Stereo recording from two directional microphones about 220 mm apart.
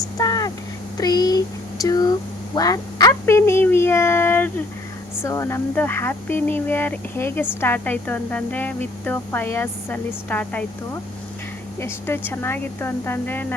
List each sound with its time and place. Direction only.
0.2 s a sound: 15° left (ahead or behind)
0.9 s a woman's voice: 15° left (ahead or behind)
11.8 s a woman's voice: 10° left (ahead or behind)